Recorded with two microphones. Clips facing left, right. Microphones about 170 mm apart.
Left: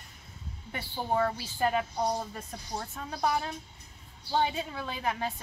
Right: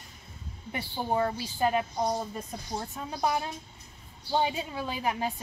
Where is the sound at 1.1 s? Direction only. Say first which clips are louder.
Even; 15° right (ahead or behind).